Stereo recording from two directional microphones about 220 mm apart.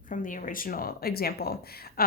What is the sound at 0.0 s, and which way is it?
A woman's voice, 35° left (ahead or behind).